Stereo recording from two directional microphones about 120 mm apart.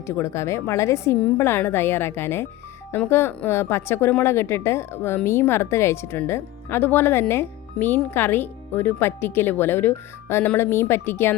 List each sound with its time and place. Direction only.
0.0 s speech: 25° left (ahead or behind)